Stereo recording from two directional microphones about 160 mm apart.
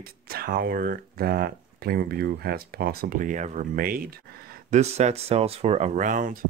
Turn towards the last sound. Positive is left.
turn(degrees=-55)  # may be behind; listen again after turning